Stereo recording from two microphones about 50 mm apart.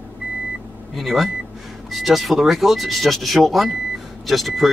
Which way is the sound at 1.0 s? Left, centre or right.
Centre.